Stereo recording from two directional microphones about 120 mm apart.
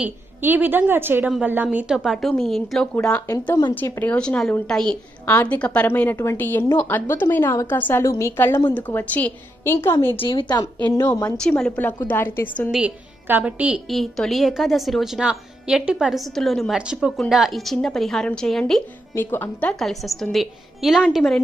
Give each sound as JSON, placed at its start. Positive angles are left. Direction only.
{"t": 0.0, "sound": "a woman's voice", "side_deg": -15}
{"t": 3.2, "sound": "a woman's voice", "side_deg": 25}
{"t": 3.8, "sound": "a woman's voice", "side_deg": 20}
{"t": 10.2, "sound": "a woman's voice", "side_deg": 40}
{"t": 10.9, "sound": "a woman's voice", "side_deg": 20}
{"t": 11.3, "sound": "a woman's voice", "side_deg": 5}
{"t": 12.7, "sound": "a woman's voice", "side_deg": -15}
{"t": 13.8, "sound": "speech", "side_deg": 0}
{"t": 19.1, "sound": "a woman's voice", "side_deg": 20}
{"t": 19.8, "sound": "speech", "side_deg": 0}